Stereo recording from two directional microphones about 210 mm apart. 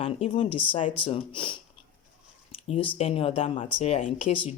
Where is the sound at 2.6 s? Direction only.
25° left (ahead or behind).